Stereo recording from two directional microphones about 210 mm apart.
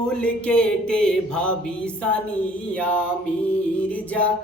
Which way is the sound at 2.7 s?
5° left (ahead or behind).